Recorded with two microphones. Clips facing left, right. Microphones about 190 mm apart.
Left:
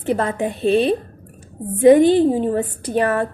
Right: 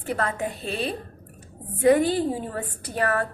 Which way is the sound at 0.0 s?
30° left (ahead or behind).